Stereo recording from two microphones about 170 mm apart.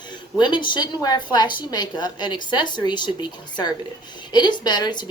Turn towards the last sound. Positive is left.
turn(degrees=25)  # may be behind; listen again after turning